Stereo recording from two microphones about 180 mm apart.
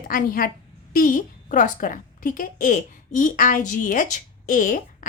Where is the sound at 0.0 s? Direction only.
50° left (ahead or behind).